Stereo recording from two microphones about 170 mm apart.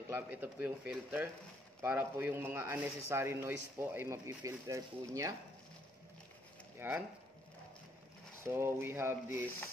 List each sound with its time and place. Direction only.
0.1 s a man's voice: 10° right (ahead or behind)
6.8 s a man's voice: 15° right (ahead or behind)
8.5 s a man's voice: 15° right (ahead or behind)